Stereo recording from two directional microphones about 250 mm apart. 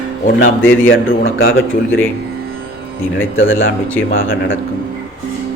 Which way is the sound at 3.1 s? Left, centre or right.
Left.